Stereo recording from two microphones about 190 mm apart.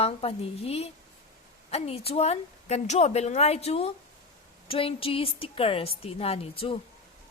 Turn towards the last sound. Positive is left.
turn(degrees=30)  # may be behind; listen again after turning